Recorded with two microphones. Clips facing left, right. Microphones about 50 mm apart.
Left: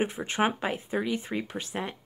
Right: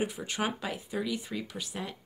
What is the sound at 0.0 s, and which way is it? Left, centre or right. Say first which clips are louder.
Speech: left 5 dB; left.